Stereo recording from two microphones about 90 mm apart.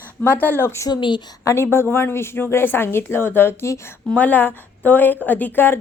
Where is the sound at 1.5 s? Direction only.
25° left (ahead or behind).